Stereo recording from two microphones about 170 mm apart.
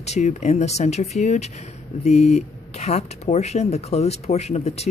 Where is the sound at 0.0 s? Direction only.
40° left (ahead or behind).